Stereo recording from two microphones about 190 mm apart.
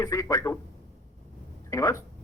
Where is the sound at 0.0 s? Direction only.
20° left (ahead or behind).